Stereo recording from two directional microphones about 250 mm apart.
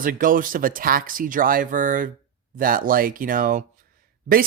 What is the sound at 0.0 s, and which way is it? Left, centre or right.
Speech, right.